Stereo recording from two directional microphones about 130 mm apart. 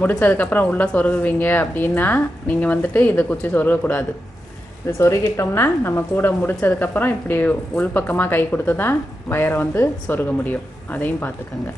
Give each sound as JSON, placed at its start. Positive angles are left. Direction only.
{"t": 0.0, "sound": "a woman's voice", "side_deg": 15}